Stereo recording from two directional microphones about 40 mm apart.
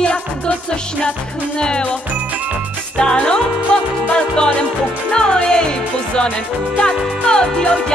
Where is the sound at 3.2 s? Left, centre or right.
Left.